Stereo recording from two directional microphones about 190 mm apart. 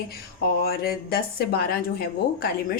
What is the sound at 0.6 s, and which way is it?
Speech, 55° left (ahead or behind).